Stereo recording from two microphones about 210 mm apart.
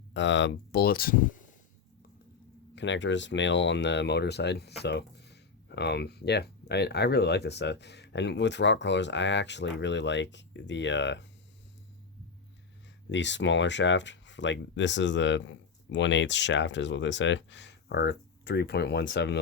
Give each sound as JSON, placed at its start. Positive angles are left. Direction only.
{"t": 0.1, "sound": "speech", "side_deg": 60}
{"t": 2.7, "sound": "speech", "side_deg": 60}
{"t": 13.1, "sound": "speech", "side_deg": 60}